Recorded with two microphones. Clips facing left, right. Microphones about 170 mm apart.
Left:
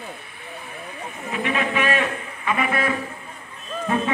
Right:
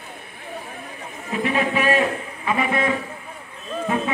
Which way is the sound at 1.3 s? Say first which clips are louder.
Right 2 dB; 35° right (ahead or behind).